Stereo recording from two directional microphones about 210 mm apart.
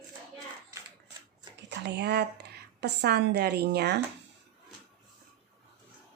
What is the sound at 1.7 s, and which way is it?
A woman's voice, 55° right (ahead or behind).